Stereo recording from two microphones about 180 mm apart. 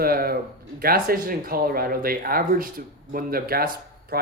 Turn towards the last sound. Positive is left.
turn(degrees=-55)  # may be behind; listen again after turning